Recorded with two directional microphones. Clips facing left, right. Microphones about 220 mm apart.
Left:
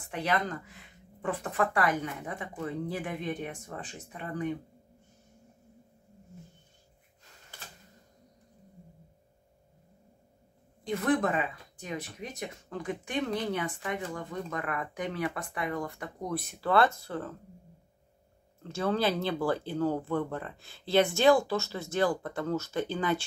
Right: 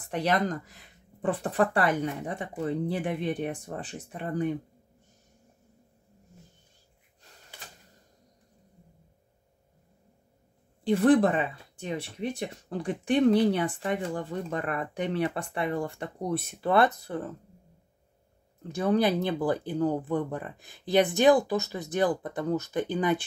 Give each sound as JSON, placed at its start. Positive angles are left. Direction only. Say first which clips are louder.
{"t": 0.1, "sound": "speech", "louder": "right 4 dB", "side_deg": -35}
{"t": 10.8, "sound": "speech", "louder": "right 7 dB", "side_deg": -30}
{"t": 18.6, "sound": "speech", "louder": "right 4 dB", "side_deg": -15}